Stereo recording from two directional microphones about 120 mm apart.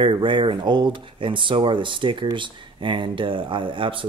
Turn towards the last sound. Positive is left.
turn(degrees=-45)  # may be behind; listen again after turning